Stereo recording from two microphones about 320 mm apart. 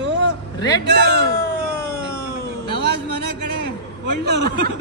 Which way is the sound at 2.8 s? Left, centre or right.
Right.